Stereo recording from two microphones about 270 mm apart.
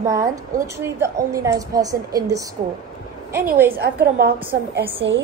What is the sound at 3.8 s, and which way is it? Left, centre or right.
A woman's voice, right.